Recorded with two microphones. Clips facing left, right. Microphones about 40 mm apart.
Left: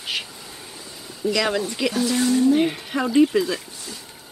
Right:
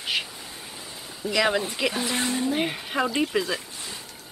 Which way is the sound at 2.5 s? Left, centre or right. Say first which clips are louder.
Left 5 dB; centre.